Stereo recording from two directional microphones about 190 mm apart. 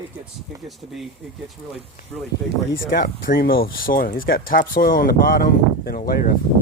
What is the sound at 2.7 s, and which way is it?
Speech, 50° left (ahead or behind).